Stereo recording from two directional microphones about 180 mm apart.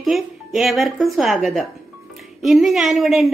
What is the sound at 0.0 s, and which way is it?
A woman's voice, centre (ahead or behind).